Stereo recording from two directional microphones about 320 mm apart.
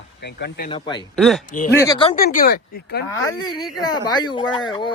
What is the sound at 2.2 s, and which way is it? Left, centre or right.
Speech, left.